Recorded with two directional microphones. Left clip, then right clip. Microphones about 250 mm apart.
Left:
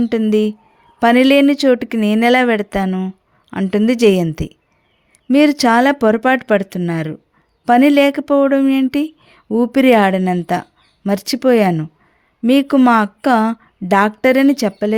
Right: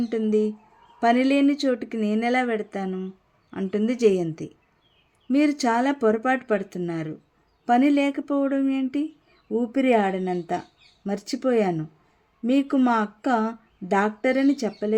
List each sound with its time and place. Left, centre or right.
0.0 s speech: left